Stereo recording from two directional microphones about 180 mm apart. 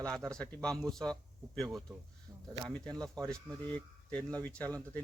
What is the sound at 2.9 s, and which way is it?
Speech, 20° right (ahead or behind).